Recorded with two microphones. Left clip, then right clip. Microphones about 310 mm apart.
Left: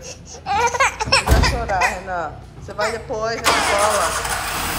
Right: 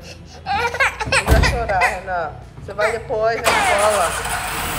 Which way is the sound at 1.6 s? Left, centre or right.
Centre.